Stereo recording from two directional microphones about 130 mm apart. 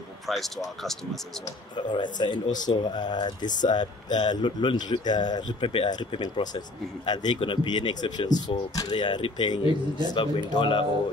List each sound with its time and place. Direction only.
0.3 s speech: centre (ahead or behind)
1.4 s speech: 35° left (ahead or behind)
2.4 s speech: 75° left (ahead or behind)
2.8 s speech: 35° left (ahead or behind)